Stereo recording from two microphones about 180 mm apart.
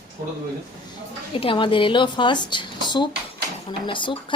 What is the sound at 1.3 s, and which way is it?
Speech, 30° left (ahead or behind).